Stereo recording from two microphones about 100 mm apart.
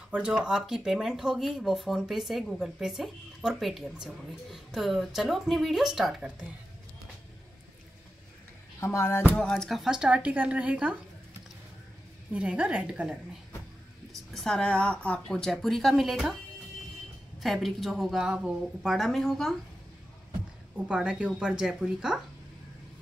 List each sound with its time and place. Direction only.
0.1 s speech: 10° right (ahead or behind)
8.7 s speech: 25° left (ahead or behind)
9.3 s speech: 5° left (ahead or behind); by 11.0 s 15° right (ahead or behind)
12.3 s speech: 10° right (ahead or behind)
14.3 s speech: 5° left (ahead or behind)
17.4 s speech: centre (ahead or behind)
20.7 s speech: 10° right (ahead or behind)